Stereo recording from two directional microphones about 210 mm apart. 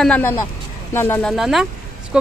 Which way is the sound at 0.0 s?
5° left (ahead or behind).